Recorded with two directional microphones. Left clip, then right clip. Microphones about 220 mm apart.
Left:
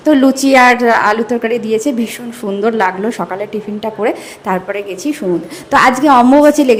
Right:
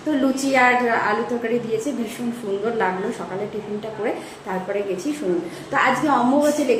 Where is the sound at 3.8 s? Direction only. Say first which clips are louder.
Left 11 dB; 45° left (ahead or behind).